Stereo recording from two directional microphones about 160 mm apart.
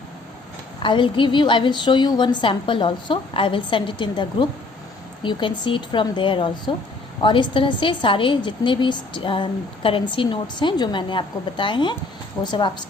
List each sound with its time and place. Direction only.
0.8 s a woman's voice: 30° left (ahead or behind)